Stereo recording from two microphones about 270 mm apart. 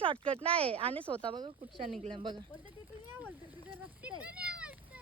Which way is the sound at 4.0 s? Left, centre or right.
Centre.